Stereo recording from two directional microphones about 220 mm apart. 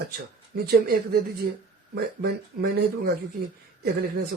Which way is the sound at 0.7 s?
45° right (ahead or behind).